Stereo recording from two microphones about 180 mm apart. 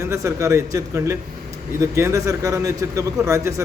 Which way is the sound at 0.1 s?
15° right (ahead or behind).